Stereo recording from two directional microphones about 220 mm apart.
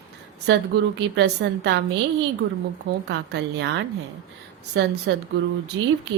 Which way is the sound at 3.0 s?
50° right (ahead or behind).